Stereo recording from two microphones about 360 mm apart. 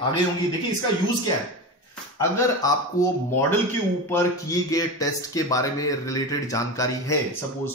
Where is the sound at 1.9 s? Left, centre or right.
Centre.